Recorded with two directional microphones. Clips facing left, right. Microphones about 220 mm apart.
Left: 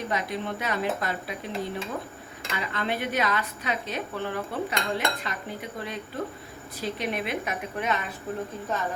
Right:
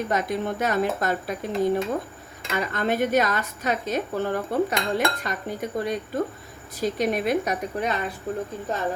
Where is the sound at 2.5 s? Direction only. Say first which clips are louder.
Right 6 dB; 45° right (ahead or behind).